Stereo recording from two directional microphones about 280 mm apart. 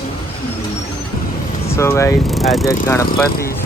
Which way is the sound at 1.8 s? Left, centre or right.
Centre.